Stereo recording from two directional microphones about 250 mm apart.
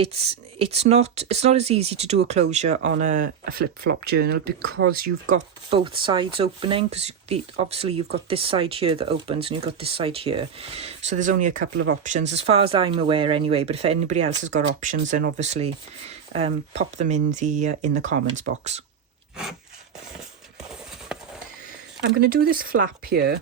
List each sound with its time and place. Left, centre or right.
0.0 s speech: right
5.3 s speech: right
22.0 s speech: right